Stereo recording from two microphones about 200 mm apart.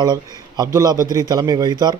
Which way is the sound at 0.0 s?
20° right (ahead or behind).